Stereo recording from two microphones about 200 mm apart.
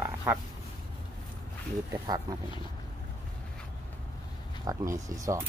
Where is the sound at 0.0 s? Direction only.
10° right (ahead or behind).